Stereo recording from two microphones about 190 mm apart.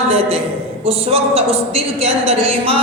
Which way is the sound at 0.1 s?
30° right (ahead or behind).